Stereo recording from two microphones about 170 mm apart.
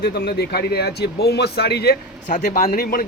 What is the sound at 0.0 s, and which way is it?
Speech, 70° left (ahead or behind).